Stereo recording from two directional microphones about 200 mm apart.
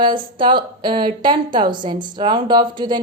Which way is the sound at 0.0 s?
25° right (ahead or behind).